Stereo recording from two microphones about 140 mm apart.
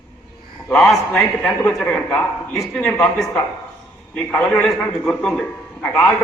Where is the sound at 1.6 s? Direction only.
10° left (ahead or behind).